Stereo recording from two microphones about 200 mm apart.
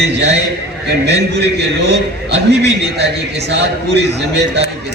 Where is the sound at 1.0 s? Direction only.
55° right (ahead or behind).